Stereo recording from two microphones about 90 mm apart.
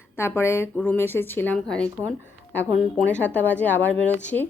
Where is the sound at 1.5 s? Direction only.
10° left (ahead or behind).